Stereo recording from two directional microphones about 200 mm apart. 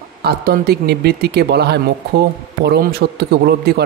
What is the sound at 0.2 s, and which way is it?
A man's voice, 50° right (ahead or behind).